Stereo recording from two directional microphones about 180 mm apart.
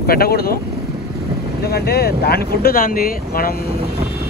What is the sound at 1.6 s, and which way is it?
Speech, 60° left (ahead or behind).